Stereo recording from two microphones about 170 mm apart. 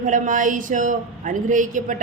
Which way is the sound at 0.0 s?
50° right (ahead or behind).